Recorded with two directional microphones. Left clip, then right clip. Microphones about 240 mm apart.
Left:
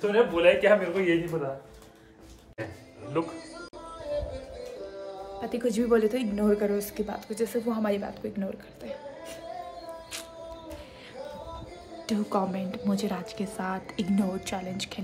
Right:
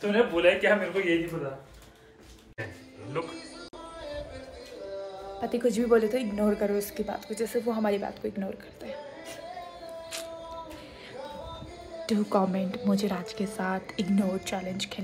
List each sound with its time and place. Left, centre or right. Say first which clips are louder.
0.0 s speech: left 2 dB; left
5.4 s a woman's voice: right 2 dB; centre
12.1 s a woman's voice: right 2 dB; centre